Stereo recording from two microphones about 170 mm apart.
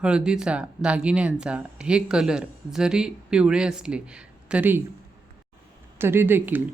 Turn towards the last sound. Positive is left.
turn(degrees=-10)  # may be behind; listen again after turning